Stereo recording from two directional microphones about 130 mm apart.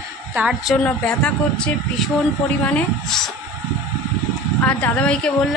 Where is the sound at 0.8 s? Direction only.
5° left (ahead or behind).